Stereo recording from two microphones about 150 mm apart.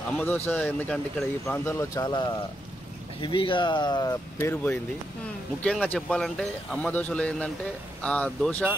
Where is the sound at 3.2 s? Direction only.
35° left (ahead or behind).